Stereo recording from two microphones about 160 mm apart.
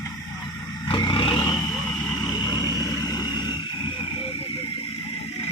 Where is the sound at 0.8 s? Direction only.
30° left (ahead or behind).